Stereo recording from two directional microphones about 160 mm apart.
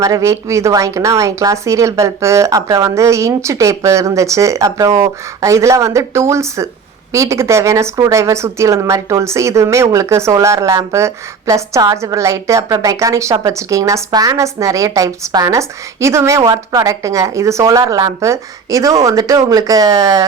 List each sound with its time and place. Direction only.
0.0 s speech: 20° right (ahead or behind)